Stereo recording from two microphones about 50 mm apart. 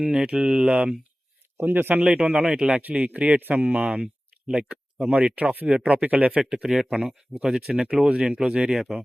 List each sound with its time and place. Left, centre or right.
0.0 s speech: centre
1.5 s speech: right
2.2 s speech: right
4.0 s speech: centre
6.3 s speech: centre